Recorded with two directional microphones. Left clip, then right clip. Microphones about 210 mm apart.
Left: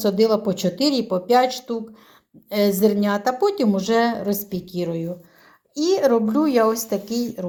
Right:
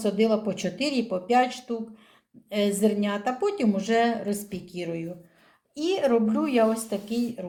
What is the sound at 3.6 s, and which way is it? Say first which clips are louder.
A woman's voice: left 4 dB; 30° left (ahead or behind).